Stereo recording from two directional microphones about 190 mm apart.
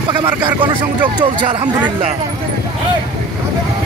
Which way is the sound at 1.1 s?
20° right (ahead or behind).